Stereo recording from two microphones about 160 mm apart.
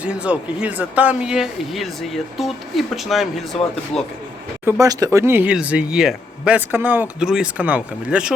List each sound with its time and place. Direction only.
0.0 s speech: 5° right (ahead or behind)
4.6 s speech: 20° right (ahead or behind)